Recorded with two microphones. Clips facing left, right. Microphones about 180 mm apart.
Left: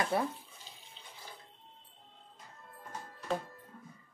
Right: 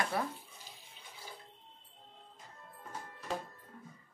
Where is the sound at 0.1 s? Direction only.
25° left (ahead or behind).